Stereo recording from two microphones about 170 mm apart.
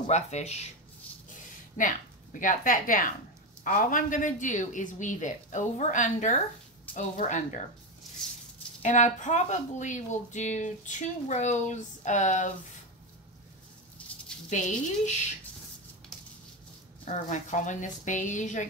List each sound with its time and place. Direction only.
0.1 s speech: 40° left (ahead or behind)
1.1 s a sound: 10° left (ahead or behind)
1.8 s a woman's voice: 50° left (ahead or behind)
8.8 s a woman's voice: 45° left (ahead or behind)
14.5 s a woman's voice: 45° left (ahead or behind)
17.0 s a woman's voice: 45° left (ahead or behind)